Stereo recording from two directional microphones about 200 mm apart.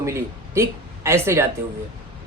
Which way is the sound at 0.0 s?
15° right (ahead or behind).